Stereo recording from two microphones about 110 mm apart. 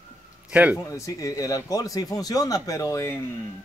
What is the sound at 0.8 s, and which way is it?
Speech, 30° left (ahead or behind).